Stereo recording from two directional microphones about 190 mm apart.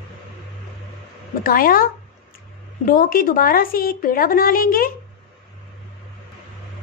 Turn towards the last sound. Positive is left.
turn(degrees=50)  # may be behind; listen again after turning